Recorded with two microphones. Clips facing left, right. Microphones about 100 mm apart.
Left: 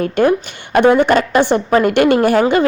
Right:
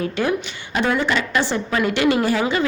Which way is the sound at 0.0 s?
50° left (ahead or behind).